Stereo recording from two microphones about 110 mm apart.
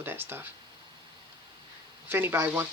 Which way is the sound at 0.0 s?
20° right (ahead or behind).